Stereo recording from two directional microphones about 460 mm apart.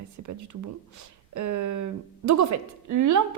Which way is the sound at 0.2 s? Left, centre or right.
Right.